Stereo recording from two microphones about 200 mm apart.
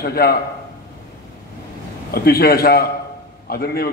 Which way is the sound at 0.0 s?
50° left (ahead or behind).